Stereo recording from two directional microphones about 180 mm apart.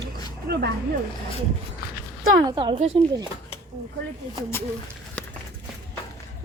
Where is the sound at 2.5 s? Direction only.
25° right (ahead or behind).